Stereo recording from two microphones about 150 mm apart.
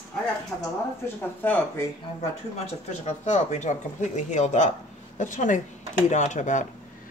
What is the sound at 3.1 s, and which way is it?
Speech, 50° left (ahead or behind).